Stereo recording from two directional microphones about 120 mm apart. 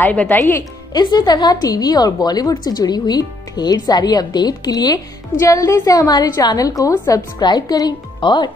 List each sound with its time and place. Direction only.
0.0 s speech: 15° left (ahead or behind)
0.9 s a woman's voice: 35° left (ahead or behind)